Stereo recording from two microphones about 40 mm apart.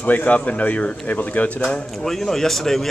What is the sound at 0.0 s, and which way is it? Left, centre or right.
Speech, left.